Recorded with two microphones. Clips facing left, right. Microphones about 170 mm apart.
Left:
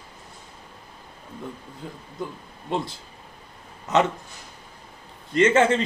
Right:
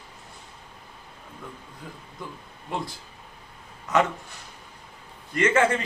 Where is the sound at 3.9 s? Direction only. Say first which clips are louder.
Left 2 dB; 25° left (ahead or behind).